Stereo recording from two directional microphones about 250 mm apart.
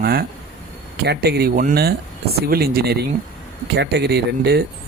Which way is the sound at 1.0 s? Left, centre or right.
Right.